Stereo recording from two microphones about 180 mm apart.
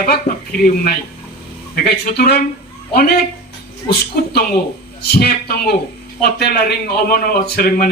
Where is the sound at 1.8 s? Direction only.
60° left (ahead or behind).